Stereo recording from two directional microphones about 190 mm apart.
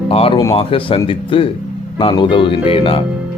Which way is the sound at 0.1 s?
30° left (ahead or behind).